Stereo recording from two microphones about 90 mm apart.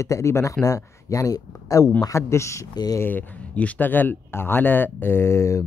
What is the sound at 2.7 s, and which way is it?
Speech, 45° left (ahead or behind).